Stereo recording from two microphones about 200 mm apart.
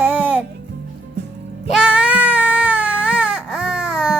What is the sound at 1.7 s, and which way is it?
Baby cry, 5° right (ahead or behind).